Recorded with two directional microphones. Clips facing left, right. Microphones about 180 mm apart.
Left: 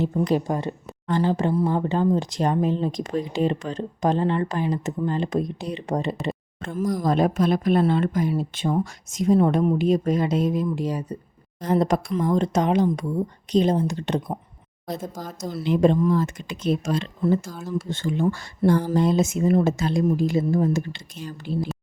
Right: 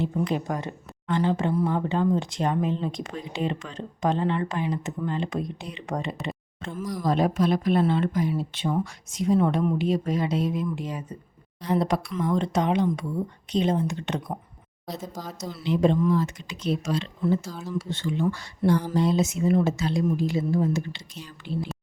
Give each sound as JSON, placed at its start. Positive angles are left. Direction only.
{"t": 0.0, "sound": "speech", "side_deg": 40}
{"t": 6.7, "sound": "speech", "side_deg": 45}
{"t": 14.8, "sound": "speech", "side_deg": 50}
{"t": 17.5, "sound": "speech", "side_deg": 10}
{"t": 17.7, "sound": "speech", "side_deg": 50}